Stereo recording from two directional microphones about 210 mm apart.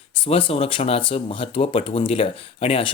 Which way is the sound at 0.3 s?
25° left (ahead or behind).